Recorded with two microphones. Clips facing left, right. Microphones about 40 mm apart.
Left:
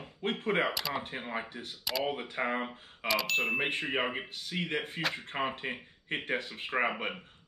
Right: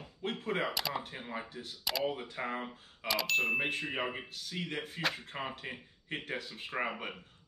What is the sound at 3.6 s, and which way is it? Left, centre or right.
Speech, left.